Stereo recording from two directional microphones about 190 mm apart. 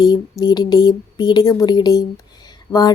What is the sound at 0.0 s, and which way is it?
Speech, 20° left (ahead or behind).